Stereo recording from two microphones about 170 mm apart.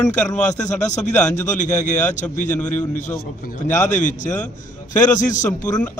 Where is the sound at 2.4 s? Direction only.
10° left (ahead or behind).